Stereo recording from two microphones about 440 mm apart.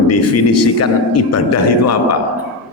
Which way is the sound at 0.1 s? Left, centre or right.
Left.